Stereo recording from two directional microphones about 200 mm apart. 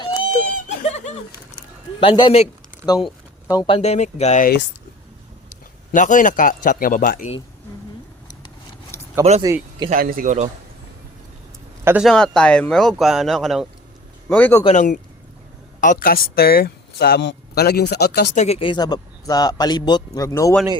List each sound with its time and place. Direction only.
0.9 s a sound: 35° left (ahead or behind)
2.0 s a man's voice: 25° left (ahead or behind)
5.9 s speech: 40° left (ahead or behind)
9.4 s speech: 20° right (ahead or behind)
9.9 s a man's voice: 45° right (ahead or behind)
11.9 s a man's voice: centre (ahead or behind)
14.6 s speech: 35° left (ahead or behind); by 18.3 s 55° left (ahead or behind)
18.3 s a man's voice: 30° left (ahead or behind); by 20.6 s 15° left (ahead or behind)